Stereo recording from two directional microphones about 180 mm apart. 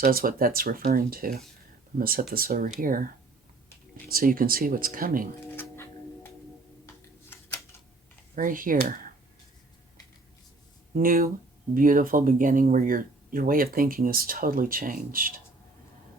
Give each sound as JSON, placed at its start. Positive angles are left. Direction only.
{"t": 0.0, "sound": "speech", "side_deg": -55}
{"t": 4.1, "sound": "speech", "side_deg": -55}
{"t": 5.5, "sound": "a sound", "side_deg": 10}
{"t": 8.4, "sound": "speech", "side_deg": -50}
{"t": 10.9, "sound": "speech", "side_deg": -50}